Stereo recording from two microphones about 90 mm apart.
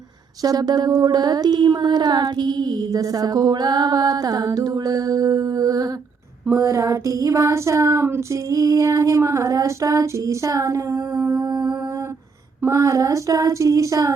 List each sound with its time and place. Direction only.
0.4 s a sound: 45° right (ahead or behind)
6.5 s female singing: 35° right (ahead or behind)
12.6 s female singing: 35° right (ahead or behind)